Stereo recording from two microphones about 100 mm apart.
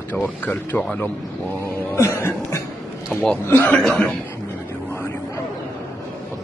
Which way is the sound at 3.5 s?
20° left (ahead or behind).